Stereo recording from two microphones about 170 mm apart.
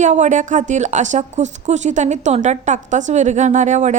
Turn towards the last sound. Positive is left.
turn(degrees=-45)  # may be behind; listen again after turning